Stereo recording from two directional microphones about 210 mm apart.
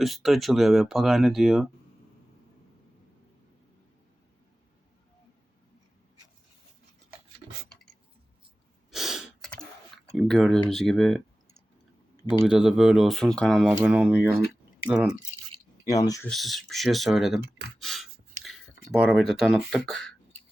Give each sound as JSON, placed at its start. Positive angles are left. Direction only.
{"t": 0.0, "sound": "speech", "side_deg": 0}
{"t": 8.9, "sound": "gasp", "side_deg": 0}
{"t": 10.2, "sound": "speech", "side_deg": 0}
{"t": 12.3, "sound": "speech", "side_deg": -5}
{"t": 15.9, "sound": "speech", "side_deg": 15}
{"t": 16.3, "sound": "speech", "side_deg": 0}
{"t": 17.7, "sound": "a sound", "side_deg": 0}
{"t": 18.9, "sound": "speech", "side_deg": 0}